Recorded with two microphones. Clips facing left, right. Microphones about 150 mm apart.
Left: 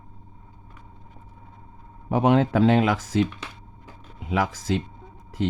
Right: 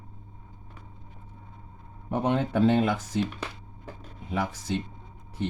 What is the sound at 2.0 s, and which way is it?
Speech, 90° left.